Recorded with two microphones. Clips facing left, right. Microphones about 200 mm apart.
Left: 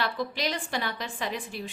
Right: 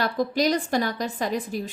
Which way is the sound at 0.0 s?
45° right (ahead or behind).